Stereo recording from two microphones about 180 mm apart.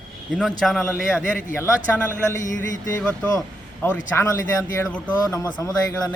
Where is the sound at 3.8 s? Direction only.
15° left (ahead or behind).